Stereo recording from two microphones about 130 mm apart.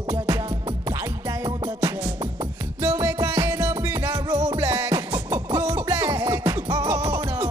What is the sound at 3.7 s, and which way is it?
Music, 30° right (ahead or behind).